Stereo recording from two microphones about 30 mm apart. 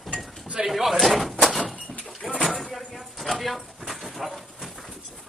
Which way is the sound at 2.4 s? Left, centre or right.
Centre.